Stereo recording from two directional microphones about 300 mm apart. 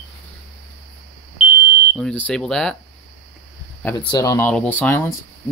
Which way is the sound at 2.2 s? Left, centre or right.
Centre.